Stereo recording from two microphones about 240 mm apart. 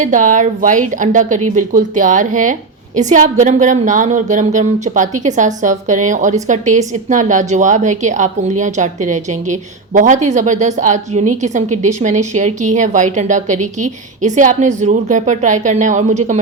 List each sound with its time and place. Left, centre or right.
0.0 s a woman's voice: right